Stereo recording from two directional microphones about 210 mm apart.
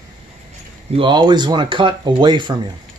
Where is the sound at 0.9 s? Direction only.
25° right (ahead or behind).